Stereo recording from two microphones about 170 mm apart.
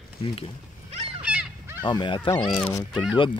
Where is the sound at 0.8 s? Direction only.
40° right (ahead or behind).